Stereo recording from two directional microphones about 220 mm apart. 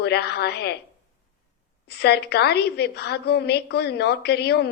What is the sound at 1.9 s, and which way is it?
A woman's voice, 50° left (ahead or behind).